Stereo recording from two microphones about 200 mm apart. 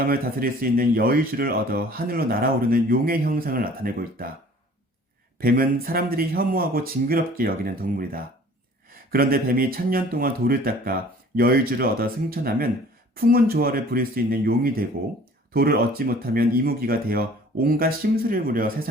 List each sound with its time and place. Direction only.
0.0 s speech: 50° right (ahead or behind)
5.4 s speech: 45° right (ahead or behind)